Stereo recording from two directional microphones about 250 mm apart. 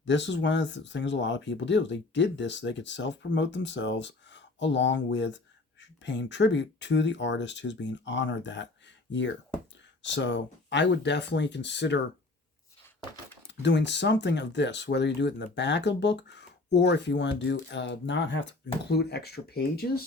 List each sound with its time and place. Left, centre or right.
0.0 s speech: left
10.0 s speech: left
13.6 s speech: left